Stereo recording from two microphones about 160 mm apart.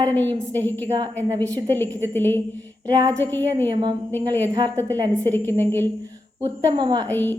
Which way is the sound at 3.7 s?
30° right (ahead or behind).